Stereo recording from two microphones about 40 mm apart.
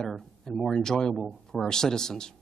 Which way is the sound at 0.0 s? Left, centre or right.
Centre.